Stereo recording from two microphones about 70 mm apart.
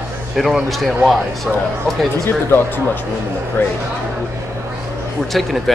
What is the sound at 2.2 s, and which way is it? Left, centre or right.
Speech, left.